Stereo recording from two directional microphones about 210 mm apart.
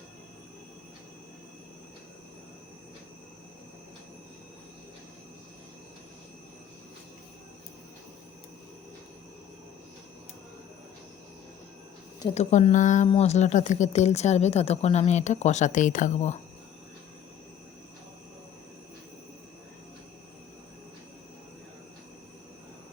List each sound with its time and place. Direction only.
12.3 s speech: 35° left (ahead or behind)